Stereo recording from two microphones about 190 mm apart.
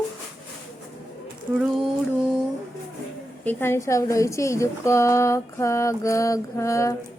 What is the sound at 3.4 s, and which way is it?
A woman's voice, 10° left (ahead or behind).